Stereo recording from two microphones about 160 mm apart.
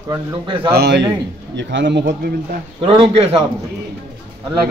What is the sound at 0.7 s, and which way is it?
A man's voice, 90° right.